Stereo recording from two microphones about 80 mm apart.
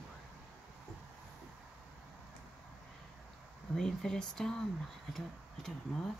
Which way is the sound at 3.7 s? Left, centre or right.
Centre.